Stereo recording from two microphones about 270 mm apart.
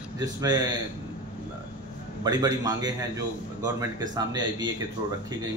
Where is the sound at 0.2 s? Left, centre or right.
Centre.